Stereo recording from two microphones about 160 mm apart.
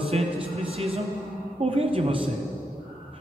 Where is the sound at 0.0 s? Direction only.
35° right (ahead or behind).